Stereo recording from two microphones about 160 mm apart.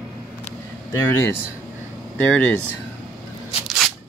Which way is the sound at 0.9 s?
15° left (ahead or behind).